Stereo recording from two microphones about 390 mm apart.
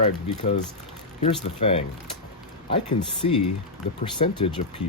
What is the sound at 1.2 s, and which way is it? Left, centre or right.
Speech, centre.